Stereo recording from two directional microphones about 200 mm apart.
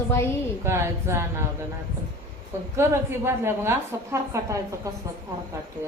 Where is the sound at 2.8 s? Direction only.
10° right (ahead or behind).